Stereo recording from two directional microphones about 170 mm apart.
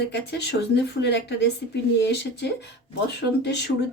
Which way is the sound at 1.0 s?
90° left.